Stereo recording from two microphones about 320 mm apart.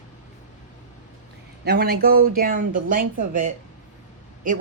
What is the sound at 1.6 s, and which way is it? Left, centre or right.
A woman's voice, right.